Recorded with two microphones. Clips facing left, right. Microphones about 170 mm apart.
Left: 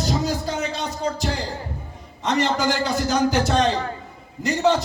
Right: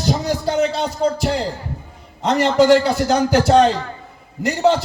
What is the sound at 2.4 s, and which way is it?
A man's voice, 70° right (ahead or behind).